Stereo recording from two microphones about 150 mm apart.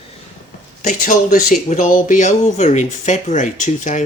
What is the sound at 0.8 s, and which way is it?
Speech, 55° left (ahead or behind).